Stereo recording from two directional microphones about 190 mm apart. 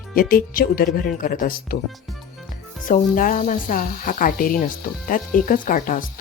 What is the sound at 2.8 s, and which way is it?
Speech, 45° left (ahead or behind).